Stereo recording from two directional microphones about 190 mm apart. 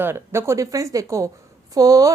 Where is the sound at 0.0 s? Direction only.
10° right (ahead or behind).